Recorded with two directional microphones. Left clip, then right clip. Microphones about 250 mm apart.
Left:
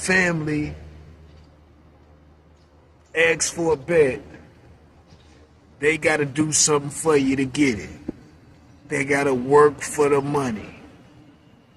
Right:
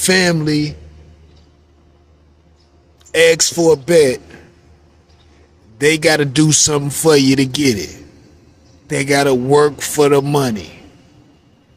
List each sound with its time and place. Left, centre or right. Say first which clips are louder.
0.1 s a man's voice: right 5 dB; right
3.1 s a man's voice: right 8 dB; right
5.8 s a man's voice: right 7 dB; right
8.9 s a man's voice: right 7 dB; right